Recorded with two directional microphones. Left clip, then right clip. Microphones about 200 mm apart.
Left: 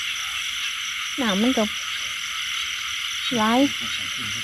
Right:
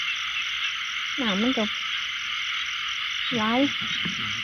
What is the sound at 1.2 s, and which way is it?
Speech, 25° left (ahead or behind).